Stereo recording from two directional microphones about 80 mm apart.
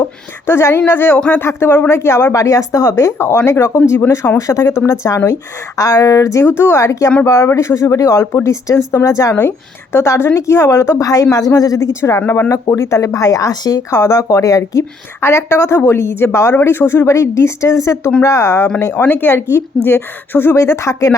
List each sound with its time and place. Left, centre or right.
0.4 s a woman's voice: left
9.3 s a woman's voice: left
13.9 s a woman's voice: left